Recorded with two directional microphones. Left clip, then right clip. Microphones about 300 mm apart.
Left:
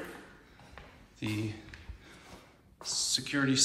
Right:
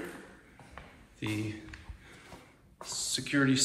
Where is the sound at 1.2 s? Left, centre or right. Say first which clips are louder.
Right 1 dB; centre.